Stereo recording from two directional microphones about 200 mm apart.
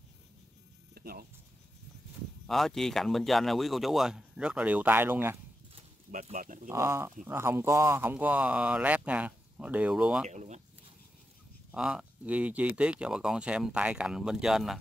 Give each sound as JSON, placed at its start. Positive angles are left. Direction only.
{"t": 0.9, "sound": "a sound", "side_deg": -50}
{"t": 2.4, "sound": "speech", "side_deg": 0}
{"t": 6.1, "sound": "speech", "side_deg": -40}
{"t": 6.7, "sound": "speech", "side_deg": -15}
{"t": 10.3, "sound": "a sound", "side_deg": -35}
{"t": 11.7, "sound": "speech", "side_deg": -5}